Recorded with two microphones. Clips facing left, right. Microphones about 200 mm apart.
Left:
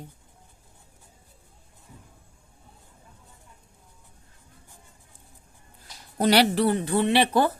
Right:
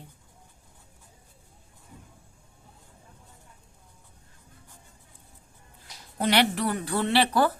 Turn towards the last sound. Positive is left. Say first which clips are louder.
# left 2 dB
turn(degrees=20)  # may be behind; listen again after turning